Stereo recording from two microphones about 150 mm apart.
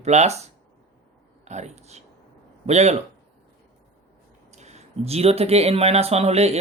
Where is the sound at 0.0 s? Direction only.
50° right (ahead or behind).